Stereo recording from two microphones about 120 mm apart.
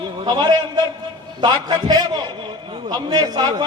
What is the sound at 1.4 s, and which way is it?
Speech, 40° right (ahead or behind).